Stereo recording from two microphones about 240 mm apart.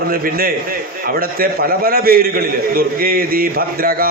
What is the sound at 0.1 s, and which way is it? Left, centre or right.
A man's voice, right.